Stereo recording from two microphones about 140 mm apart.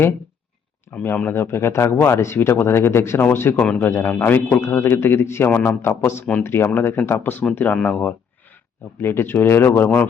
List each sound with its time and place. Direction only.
0.9 s speech: 10° left (ahead or behind)